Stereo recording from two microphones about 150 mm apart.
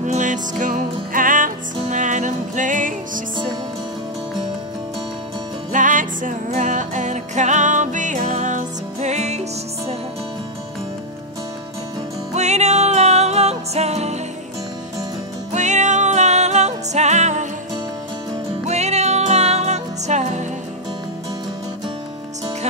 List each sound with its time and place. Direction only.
0.0 s music: 55° right (ahead or behind)
5.7 s music: 60° right (ahead or behind)
12.4 s music: 50° right (ahead or behind)
15.5 s music: 50° right (ahead or behind)
18.7 s music: 45° right (ahead or behind)